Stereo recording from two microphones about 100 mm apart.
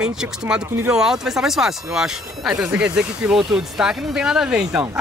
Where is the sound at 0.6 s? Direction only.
25° right (ahead or behind).